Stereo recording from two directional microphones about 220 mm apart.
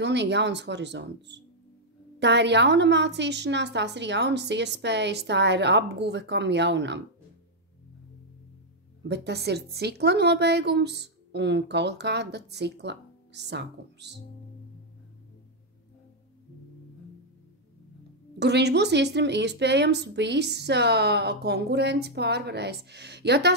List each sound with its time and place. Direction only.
0.0 s a woman's voice: 50° right (ahead or behind)
9.0 s a woman's voice: 50° right (ahead or behind)
18.4 s a woman's voice: 50° right (ahead or behind)